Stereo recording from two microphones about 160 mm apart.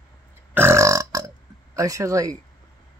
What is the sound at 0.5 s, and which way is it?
Burping, 15° right (ahead or behind).